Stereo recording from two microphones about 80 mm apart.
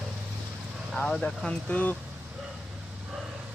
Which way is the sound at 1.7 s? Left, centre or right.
Left.